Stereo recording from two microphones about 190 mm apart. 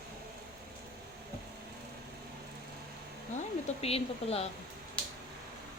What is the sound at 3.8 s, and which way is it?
Speech, 30° left (ahead or behind).